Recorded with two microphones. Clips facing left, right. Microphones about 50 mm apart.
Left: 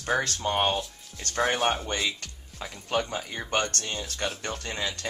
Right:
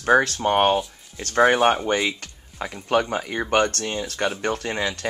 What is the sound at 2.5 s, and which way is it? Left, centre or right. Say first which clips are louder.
Speech: right 7 dB; right.